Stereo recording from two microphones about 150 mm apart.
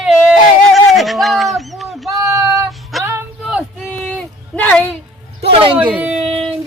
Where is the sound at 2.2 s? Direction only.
20° right (ahead or behind).